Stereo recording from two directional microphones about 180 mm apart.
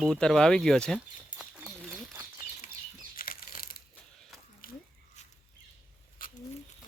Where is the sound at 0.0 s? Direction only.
5° left (ahead or behind).